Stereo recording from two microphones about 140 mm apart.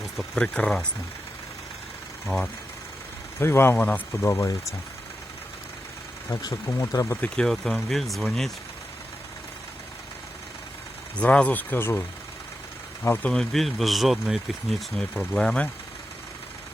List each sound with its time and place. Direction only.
0.0 s speech: 5° left (ahead or behind)
2.2 s speech: 5° left (ahead or behind)
3.4 s speech: 15° left (ahead or behind)
6.3 s speech: 25° left (ahead or behind)
7.2 s speech: 5° left (ahead or behind)
11.2 s speech: 10° left (ahead or behind)
13.1 s speech: 5° left (ahead or behind)